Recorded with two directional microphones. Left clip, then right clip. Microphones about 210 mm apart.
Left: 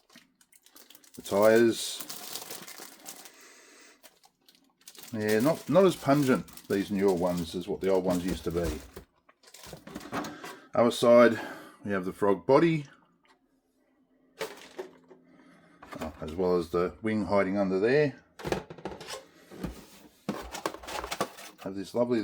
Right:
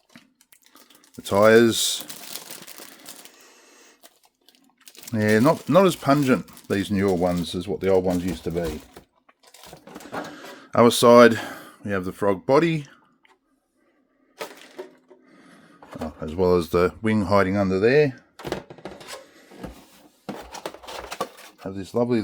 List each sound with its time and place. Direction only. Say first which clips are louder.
1.2 s speech: right 6 dB; 45° right (ahead or behind)
5.1 s speech: right 7 dB; 60° right (ahead or behind); by 6.8 s 35° right (ahead or behind)
6.9 s speech: right 5 dB; 60° right (ahead or behind)
10.3 s speech: right 7 dB; 60° right (ahead or behind); by 12.9 s 30° right (ahead or behind)
16.2 s speech: right 7 dB; 55° right (ahead or behind)
21.2 s drawer open or close: right 4 dB; 5° left (ahead or behind)
21.7 s speech: right 5 dB; 50° right (ahead or behind)